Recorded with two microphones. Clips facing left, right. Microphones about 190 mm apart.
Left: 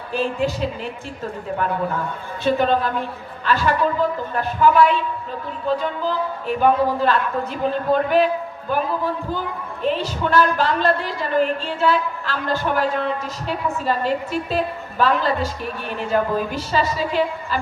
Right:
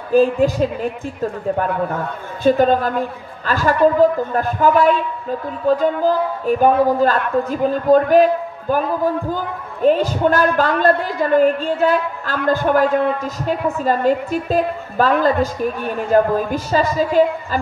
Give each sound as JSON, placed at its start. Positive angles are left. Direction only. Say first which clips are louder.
{"t": 0.1, "sound": "a man's voice", "louder": "right 8 dB", "side_deg": -45}
{"t": 2.4, "sound": "a man's voice", "louder": "right 5 dB", "side_deg": -45}